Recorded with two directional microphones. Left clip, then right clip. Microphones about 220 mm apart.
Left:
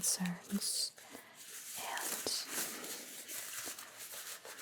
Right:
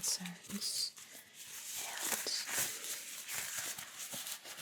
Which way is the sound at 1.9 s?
35° left (ahead or behind).